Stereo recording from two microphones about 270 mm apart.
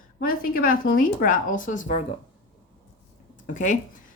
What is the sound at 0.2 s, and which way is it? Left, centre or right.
Speech, left.